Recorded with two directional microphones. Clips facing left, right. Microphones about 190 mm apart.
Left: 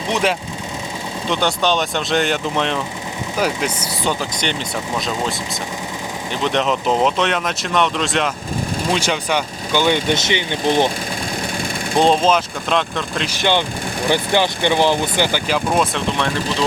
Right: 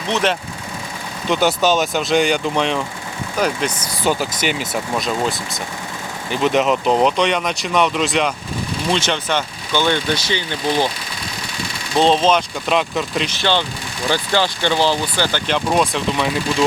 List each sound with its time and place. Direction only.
0.1 s speech: 10° left (ahead or behind)
1.3 s speech: 5° right (ahead or behind)
4.0 s speech: 5° right (ahead or behind)
6.4 s speech: 5° right (ahead or behind)
8.9 s speech: 10° left (ahead or behind)
11.9 s speech: 10° left (ahead or behind)
12.6 s speech: 5° right (ahead or behind)
13.3 s speech: 15° left (ahead or behind)
15.4 s speech: centre (ahead or behind)